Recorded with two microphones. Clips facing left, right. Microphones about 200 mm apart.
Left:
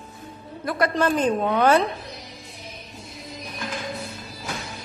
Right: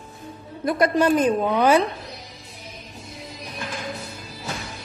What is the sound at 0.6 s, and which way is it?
A woman's voice, 15° right (ahead or behind).